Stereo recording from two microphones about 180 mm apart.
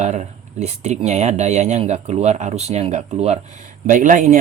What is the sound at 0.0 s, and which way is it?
Speech, 40° right (ahead or behind).